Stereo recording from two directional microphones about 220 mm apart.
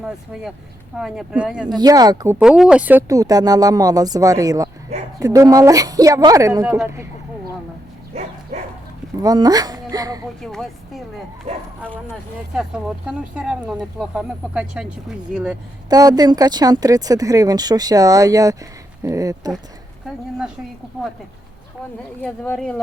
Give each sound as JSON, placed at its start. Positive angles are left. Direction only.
{"t": 0.9, "sound": "speech", "side_deg": -5}
{"t": 1.7, "sound": "speech", "side_deg": -20}
{"t": 9.2, "sound": "speech", "side_deg": -15}
{"t": 10.4, "sound": "speech", "side_deg": 0}
{"t": 12.5, "sound": "speech", "side_deg": -5}
{"t": 15.9, "sound": "speech", "side_deg": -15}
{"t": 22.2, "sound": "speech", "side_deg": 5}